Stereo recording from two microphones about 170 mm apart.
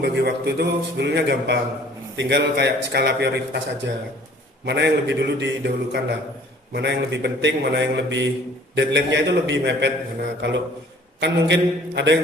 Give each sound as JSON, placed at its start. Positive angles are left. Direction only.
{"t": 0.0, "sound": "a man's voice", "side_deg": -80}
{"t": 11.2, "sound": "a man's voice", "side_deg": -90}